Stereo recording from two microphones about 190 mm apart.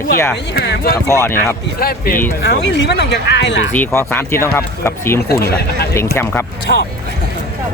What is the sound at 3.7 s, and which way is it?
Speech, 10° left (ahead or behind).